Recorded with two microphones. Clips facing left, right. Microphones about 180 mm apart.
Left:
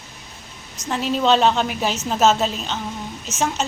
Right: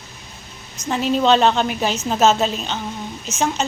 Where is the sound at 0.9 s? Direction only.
Centre (ahead or behind).